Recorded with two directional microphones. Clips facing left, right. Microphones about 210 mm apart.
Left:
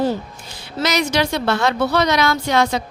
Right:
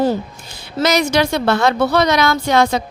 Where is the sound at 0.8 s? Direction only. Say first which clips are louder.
Right 4 dB; 50° right (ahead or behind).